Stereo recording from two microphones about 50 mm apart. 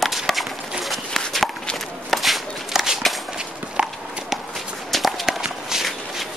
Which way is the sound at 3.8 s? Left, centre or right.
Right.